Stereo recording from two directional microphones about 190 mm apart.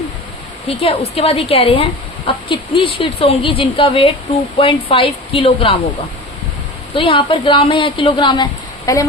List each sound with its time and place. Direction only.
0.7 s speech: 30° left (ahead or behind)
6.9 s speech: 30° left (ahead or behind)